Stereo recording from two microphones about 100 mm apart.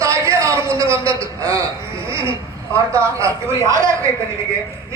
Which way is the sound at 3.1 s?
30° right (ahead or behind).